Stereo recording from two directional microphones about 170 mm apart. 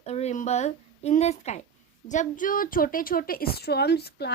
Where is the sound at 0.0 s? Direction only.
40° left (ahead or behind).